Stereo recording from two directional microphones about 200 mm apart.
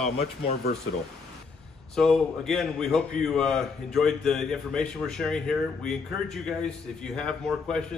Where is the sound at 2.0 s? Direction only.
5° left (ahead or behind).